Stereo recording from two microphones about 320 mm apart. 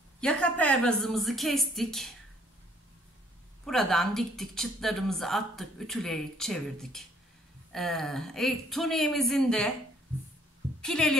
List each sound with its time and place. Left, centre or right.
0.2 s speech: centre
3.6 s speech: centre
10.8 s speech: centre